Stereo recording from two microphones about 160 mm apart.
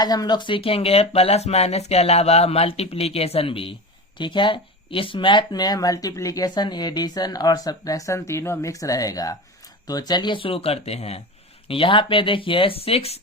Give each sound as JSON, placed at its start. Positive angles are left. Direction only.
{"t": 0.0, "sound": "speech", "side_deg": 25}